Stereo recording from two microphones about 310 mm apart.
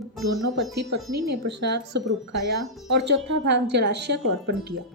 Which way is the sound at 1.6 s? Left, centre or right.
Right.